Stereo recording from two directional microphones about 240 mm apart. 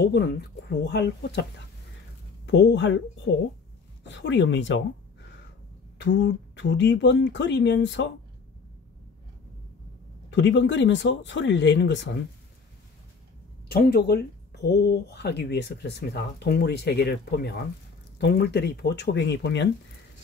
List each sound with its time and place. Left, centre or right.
0.0 s speech: left
2.4 s speech: left
4.1 s speech: left
5.9 s speech: left
10.3 s speech: left
13.7 s speech: left